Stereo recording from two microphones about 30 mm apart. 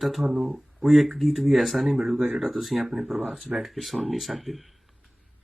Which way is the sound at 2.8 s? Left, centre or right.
Centre.